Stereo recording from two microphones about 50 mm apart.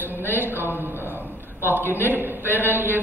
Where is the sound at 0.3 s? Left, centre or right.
Right.